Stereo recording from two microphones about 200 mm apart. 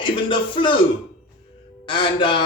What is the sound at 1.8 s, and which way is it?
Speech, 25° left (ahead or behind).